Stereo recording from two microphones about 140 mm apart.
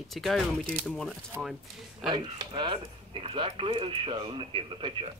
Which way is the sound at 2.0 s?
30° right (ahead or behind).